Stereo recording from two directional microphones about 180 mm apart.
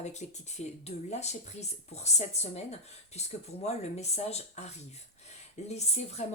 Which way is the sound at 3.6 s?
35° left (ahead or behind).